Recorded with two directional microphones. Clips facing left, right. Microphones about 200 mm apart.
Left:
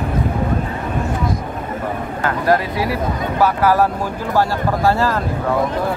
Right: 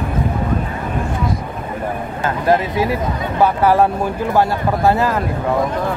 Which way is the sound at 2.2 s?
20° right (ahead or behind).